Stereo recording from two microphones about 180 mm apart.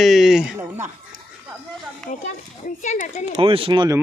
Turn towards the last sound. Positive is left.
turn(degrees=-25)  # may be behind; listen again after turning